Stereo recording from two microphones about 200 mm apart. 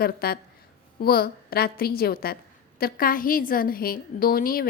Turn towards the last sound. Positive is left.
turn(degrees=45)  # may be behind; listen again after turning